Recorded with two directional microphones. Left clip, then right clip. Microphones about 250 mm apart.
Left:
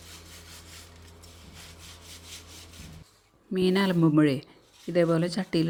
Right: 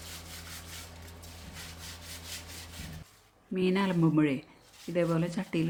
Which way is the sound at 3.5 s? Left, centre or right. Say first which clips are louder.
Left 4 dB; left.